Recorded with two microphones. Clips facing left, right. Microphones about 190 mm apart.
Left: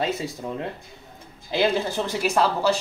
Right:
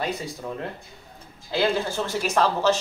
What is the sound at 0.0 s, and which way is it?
A man's voice, 20° left (ahead or behind).